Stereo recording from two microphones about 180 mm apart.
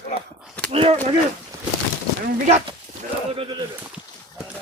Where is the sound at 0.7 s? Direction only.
30° right (ahead or behind).